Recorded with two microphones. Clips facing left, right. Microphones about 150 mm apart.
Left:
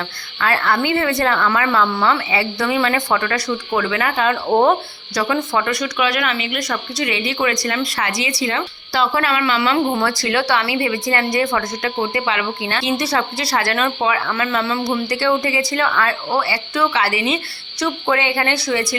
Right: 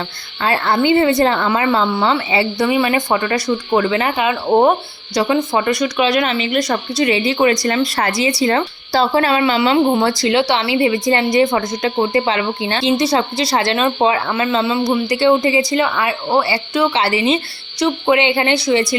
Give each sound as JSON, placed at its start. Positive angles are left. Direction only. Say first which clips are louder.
{"t": 0.3, "sound": "speech", "louder": "right 2 dB", "side_deg": -25}
{"t": 4.2, "sound": "speech", "louder": "right 1 dB", "side_deg": -10}
{"t": 11.9, "sound": "speech", "louder": "right 6 dB", "side_deg": -30}